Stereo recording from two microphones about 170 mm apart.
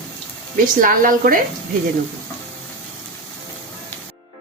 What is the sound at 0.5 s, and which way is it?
Speech, 55° right (ahead or behind).